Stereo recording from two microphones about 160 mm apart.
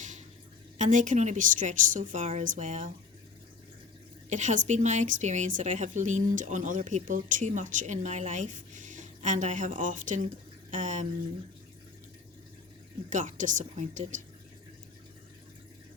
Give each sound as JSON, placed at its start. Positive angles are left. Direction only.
{"t": 0.8, "sound": "a woman's voice", "side_deg": -50}
{"t": 4.3, "sound": "a woman's voice", "side_deg": -50}
{"t": 13.1, "sound": "a woman's voice", "side_deg": -55}